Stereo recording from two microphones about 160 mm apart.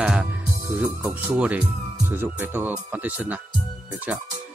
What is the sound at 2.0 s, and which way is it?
Speech, 15° right (ahead or behind).